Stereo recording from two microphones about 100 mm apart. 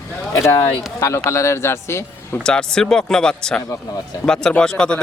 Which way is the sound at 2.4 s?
5° left (ahead or behind).